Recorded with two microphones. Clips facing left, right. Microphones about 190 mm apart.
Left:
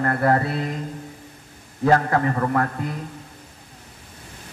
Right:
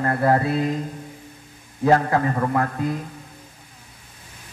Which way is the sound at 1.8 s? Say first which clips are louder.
Even; 15° right (ahead or behind).